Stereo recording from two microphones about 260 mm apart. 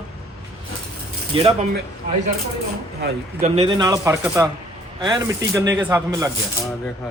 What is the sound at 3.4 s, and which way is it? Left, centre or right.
A man's voice, centre.